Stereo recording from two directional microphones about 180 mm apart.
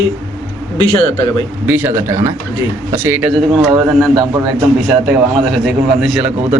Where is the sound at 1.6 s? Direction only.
10° right (ahead or behind).